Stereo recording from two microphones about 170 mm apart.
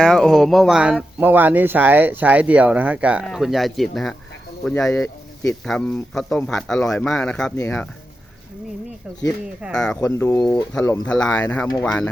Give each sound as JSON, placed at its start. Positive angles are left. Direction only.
{"t": 0.0, "sound": "speech", "side_deg": 5}
{"t": 5.0, "sound": "a sound", "side_deg": 15}
{"t": 5.6, "sound": "speech", "side_deg": 5}
{"t": 9.7, "sound": "speech", "side_deg": 5}
{"t": 10.0, "sound": "speech", "side_deg": 15}